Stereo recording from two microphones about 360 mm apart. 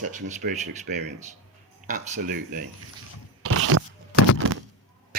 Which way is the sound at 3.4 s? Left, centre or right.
Right.